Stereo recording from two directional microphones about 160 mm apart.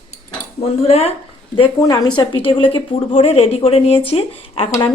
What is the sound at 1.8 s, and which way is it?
A woman's voice, 20° left (ahead or behind).